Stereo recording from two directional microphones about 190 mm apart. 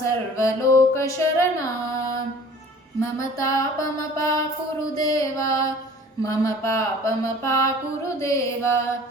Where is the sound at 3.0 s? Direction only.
15° left (ahead or behind).